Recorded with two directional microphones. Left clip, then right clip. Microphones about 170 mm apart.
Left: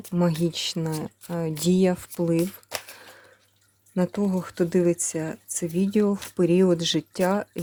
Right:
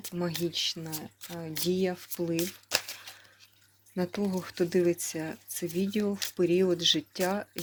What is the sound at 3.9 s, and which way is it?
Speech, 35° left (ahead or behind).